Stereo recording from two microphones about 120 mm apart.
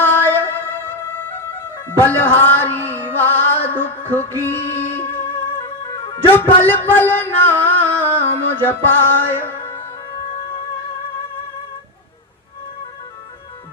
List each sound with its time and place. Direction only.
0.0 s music: 15° left (ahead or behind)
1.9 s a man's voice: 20° left (ahead or behind)
2.9 s music: 15° left (ahead or behind)
6.6 s a man's voice: 15° left (ahead or behind)
7.6 s music: 15° left (ahead or behind)